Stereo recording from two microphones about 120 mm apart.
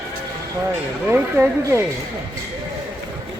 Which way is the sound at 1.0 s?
20° right (ahead or behind).